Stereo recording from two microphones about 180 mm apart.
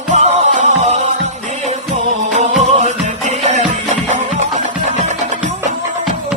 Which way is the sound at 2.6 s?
40° right (ahead or behind).